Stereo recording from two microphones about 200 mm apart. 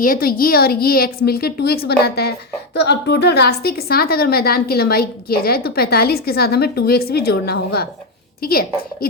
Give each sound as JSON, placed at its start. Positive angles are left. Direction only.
{"t": 0.0, "sound": "a woman's voice", "side_deg": 45}